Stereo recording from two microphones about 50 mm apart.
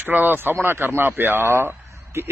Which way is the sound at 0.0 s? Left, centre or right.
Right.